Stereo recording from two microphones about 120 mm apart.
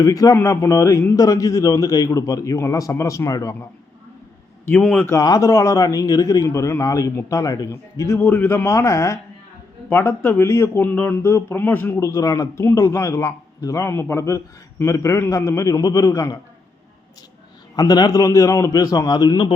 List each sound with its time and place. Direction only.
0.0 s a man's voice: 30° left (ahead or behind)
4.8 s speech: 5° left (ahead or behind)
5.1 s a man's voice: 30° left (ahead or behind)
11.9 s a man's voice: 25° left (ahead or behind)
17.7 s a man's voice: 35° left (ahead or behind)